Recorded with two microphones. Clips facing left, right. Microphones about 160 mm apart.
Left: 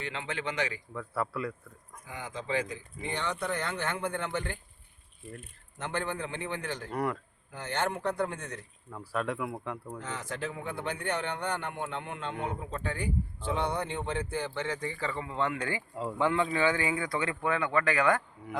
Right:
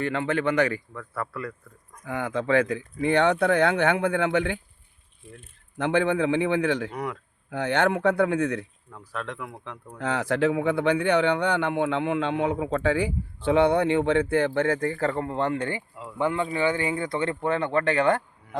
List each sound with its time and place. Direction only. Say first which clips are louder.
0.0 s speech: right 11 dB; 55° right (ahead or behind)
0.9 s speech: even; 10° left (ahead or behind)
2.0 s speech: right 11 dB; 60° right (ahead or behind)
5.7 s speech: right 11 dB; 70° right (ahead or behind)
6.9 s speech: even; centre (ahead or behind)
7.5 s speech: right 9 dB; 65° right (ahead or behind)
8.9 s speech: left 3 dB; 10° left (ahead or behind)
10.0 s speech: right 17 dB; 70° right (ahead or behind); by 15.4 s 50° right (ahead or behind)
15.4 s speech: right 5 dB; 30° right (ahead or behind)